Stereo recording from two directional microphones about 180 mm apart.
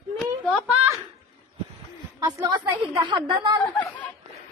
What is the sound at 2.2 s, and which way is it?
A woman's voice, 20° right (ahead or behind).